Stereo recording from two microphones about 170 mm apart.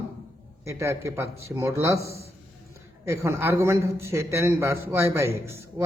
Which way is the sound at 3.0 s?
15° right (ahead or behind).